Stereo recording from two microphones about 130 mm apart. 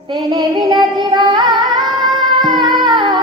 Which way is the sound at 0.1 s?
35° right (ahead or behind).